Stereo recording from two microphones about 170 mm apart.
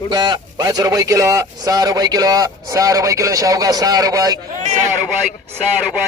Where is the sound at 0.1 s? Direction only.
25° right (ahead or behind).